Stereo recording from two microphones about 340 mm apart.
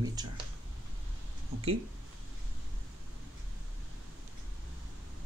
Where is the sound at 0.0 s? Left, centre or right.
Centre.